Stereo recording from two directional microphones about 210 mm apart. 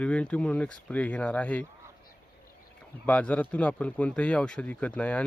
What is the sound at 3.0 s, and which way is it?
Speech, 5° left (ahead or behind).